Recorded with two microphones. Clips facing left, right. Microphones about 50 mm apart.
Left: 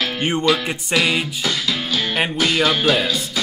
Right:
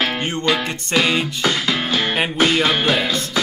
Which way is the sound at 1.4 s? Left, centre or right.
Right.